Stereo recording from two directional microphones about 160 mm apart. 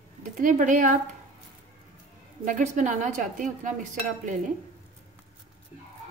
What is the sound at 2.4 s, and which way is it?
A woman's voice, 50° right (ahead or behind).